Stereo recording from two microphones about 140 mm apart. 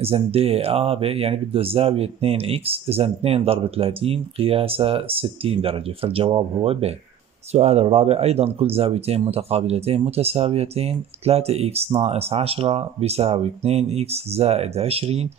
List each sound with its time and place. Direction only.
0.0 s speech: 45° right (ahead or behind)